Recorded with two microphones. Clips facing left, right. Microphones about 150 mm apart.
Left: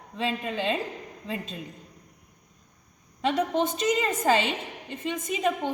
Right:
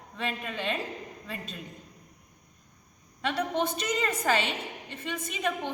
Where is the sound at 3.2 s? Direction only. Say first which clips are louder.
Left 4 dB; 20° left (ahead or behind).